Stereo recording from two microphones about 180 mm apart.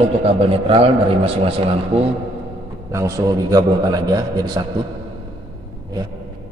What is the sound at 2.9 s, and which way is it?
A man's voice, 20° right (ahead or behind).